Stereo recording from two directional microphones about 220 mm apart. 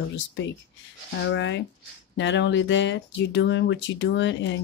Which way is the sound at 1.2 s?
55° left (ahead or behind).